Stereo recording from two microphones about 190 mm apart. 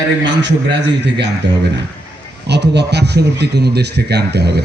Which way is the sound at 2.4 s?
60° right (ahead or behind).